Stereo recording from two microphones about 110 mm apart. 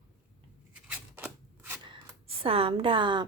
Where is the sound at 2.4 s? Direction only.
55° right (ahead or behind).